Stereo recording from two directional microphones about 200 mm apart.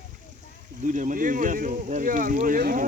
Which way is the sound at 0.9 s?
40° right (ahead or behind).